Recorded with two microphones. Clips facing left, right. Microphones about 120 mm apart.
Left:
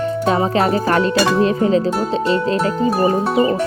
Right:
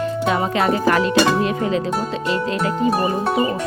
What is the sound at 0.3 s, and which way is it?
Music, 35° left (ahead or behind).